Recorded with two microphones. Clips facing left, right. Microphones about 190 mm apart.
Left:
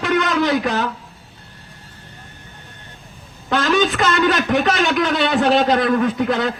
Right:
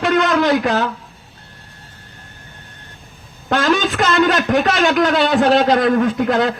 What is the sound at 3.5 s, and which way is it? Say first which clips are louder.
A man's voice: right 1 dB; 50° right (ahead or behind).